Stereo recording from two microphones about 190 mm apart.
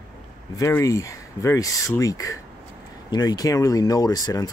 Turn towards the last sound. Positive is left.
turn(degrees=20)  # may be behind; listen again after turning